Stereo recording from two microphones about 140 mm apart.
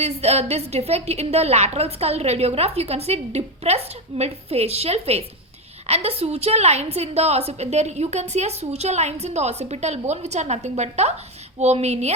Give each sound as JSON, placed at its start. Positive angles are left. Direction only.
{"t": 0.0, "sound": "a woman's voice", "side_deg": -50}